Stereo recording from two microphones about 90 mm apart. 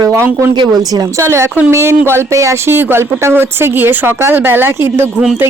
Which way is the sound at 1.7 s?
30° right (ahead or behind).